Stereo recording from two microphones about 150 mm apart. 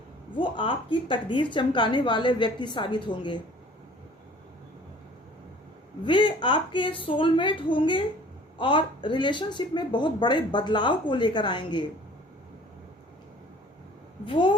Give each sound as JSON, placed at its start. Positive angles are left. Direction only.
{"t": 0.3, "sound": "speech", "side_deg": 35}
{"t": 6.1, "sound": "speech", "side_deg": 30}
{"t": 14.3, "sound": "speech", "side_deg": 30}